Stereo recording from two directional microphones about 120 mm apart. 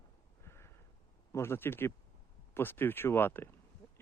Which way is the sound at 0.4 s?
20° left (ahead or behind).